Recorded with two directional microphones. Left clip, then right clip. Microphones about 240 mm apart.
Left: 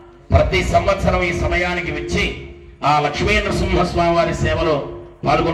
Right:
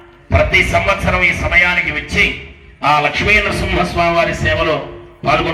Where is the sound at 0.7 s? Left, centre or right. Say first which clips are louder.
Right 2 dB; left.